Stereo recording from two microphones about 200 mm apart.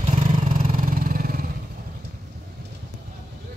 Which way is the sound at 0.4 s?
40° right (ahead or behind).